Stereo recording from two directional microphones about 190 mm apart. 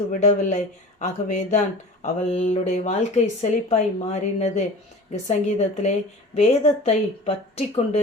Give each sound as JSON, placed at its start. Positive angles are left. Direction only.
{"t": 0.1, "sound": "speech", "side_deg": 40}